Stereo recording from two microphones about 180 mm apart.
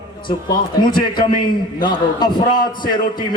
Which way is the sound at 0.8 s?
25° left (ahead or behind).